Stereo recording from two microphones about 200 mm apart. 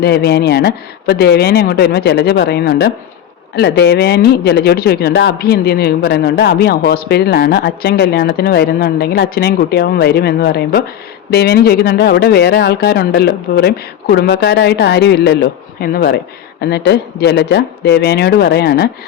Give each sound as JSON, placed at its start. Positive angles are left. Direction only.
{"t": 0.0, "sound": "speech", "side_deg": 55}